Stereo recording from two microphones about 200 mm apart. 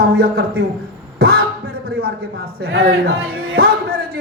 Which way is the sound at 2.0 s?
50° right (ahead or behind).